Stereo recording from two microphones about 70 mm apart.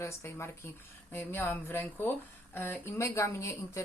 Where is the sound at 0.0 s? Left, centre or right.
Left.